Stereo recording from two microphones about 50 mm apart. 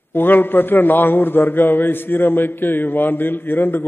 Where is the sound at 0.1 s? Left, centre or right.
Left.